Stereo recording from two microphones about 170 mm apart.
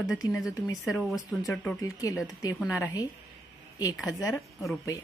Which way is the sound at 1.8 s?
20° left (ahead or behind).